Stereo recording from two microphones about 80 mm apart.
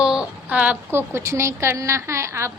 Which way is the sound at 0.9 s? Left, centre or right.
Right.